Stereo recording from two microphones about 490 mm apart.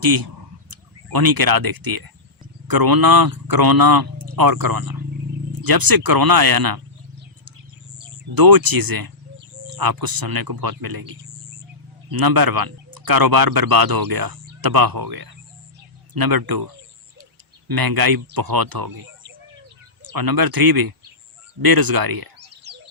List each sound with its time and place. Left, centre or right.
0.0 s speech: right
8.4 s speech: right
12.1 s speech: right
17.7 s speech: right
20.1 s speech: right
22.4 s a sound: centre